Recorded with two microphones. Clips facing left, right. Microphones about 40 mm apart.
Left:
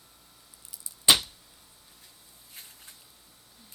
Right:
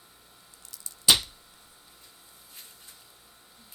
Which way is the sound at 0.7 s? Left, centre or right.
Centre.